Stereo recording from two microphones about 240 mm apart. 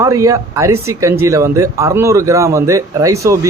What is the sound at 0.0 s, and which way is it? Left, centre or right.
A man's voice, centre.